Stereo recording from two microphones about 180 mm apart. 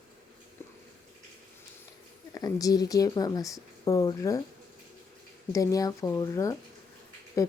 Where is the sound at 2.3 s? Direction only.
20° left (ahead or behind).